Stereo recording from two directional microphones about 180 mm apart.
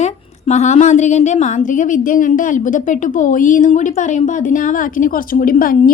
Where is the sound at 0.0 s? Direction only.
40° left (ahead or behind).